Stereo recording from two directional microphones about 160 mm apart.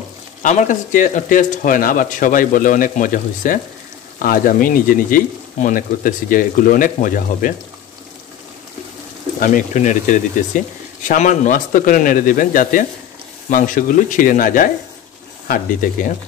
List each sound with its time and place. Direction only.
0.4 s speech: 50° left (ahead or behind)
9.4 s speech: 50° left (ahead or behind)